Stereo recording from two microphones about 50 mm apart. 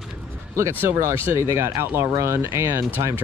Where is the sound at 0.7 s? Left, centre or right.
Right.